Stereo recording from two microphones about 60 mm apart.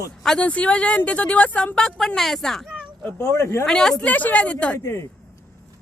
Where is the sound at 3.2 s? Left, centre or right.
Left.